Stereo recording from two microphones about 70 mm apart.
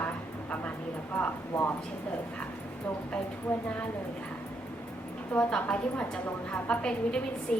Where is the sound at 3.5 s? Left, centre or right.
Left.